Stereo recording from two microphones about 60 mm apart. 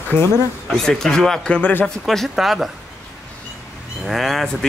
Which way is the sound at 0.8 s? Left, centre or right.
Centre.